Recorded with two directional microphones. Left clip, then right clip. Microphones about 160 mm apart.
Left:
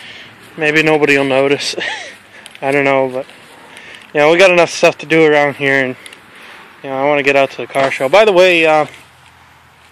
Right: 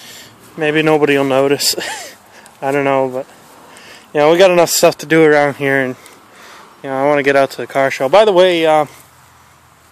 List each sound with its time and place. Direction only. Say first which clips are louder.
0.6 s a man's voice: left 1 dB; 30° right (ahead or behind)
2.6 s speech: left 2 dB; 15° right (ahead or behind)
4.1 s speech: left 1 dB; 30° right (ahead or behind); by 5.1 s 45° right (ahead or behind)
5.2 s a man's voice: even; 30° right (ahead or behind)
6.8 s speech: even; 35° right (ahead or behind)
8.0 s speech: left 1 dB; 10° right (ahead or behind)